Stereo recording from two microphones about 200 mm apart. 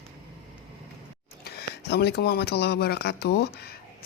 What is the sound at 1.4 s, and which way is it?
Speech, 55° left (ahead or behind).